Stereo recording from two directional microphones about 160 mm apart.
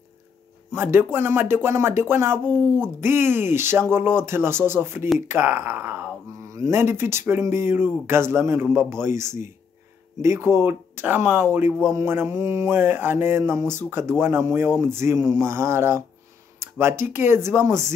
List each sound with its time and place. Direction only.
0.7 s speech: 15° right (ahead or behind)
16.5 s a sound: 15° right (ahead or behind)
17.0 s speech: 15° right (ahead or behind)